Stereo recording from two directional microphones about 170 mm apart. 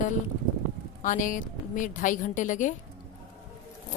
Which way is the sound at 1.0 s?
50° left (ahead or behind).